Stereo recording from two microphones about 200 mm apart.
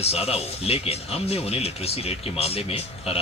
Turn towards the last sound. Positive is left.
turn(degrees=30)  # may be behind; listen again after turning